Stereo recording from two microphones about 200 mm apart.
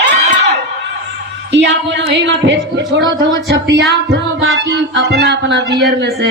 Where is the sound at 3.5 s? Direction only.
60° right (ahead or behind).